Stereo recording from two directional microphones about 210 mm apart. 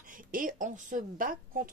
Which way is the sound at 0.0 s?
40° right (ahead or behind).